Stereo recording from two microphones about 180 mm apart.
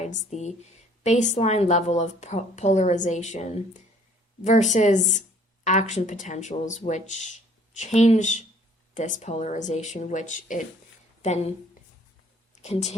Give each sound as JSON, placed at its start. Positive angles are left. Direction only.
{"t": 0.0, "sound": "a woman's voice", "side_deg": 40}
{"t": 12.6, "sound": "a woman's voice", "side_deg": 35}